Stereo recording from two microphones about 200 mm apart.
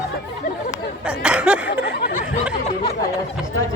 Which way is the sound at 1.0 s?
5° right (ahead or behind).